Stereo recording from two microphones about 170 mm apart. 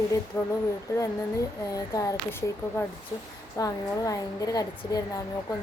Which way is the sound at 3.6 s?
20° left (ahead or behind).